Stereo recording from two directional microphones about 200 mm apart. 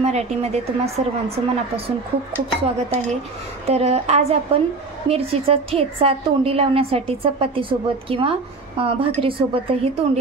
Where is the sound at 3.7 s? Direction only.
30° right (ahead or behind).